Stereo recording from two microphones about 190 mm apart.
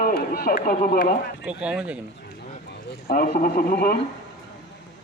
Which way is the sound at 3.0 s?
50° left (ahead or behind).